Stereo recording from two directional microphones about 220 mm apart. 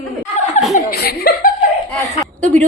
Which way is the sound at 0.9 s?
40° left (ahead or behind).